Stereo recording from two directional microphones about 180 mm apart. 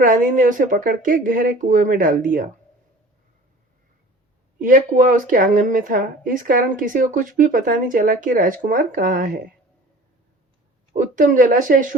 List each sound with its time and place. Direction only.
0.0 s a woman's voice: 50° right (ahead or behind)
4.6 s a woman's voice: 50° right (ahead or behind)
10.9 s a woman's voice: 50° right (ahead or behind)